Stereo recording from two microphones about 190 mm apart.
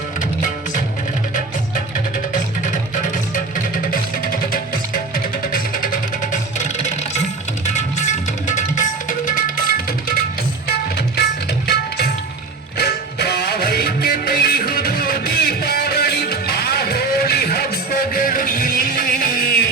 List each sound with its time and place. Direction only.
2.3 s music: 40° left (ahead or behind)
11.7 s tabla: 55° left (ahead or behind)
12.7 s music: 55° left (ahead or behind)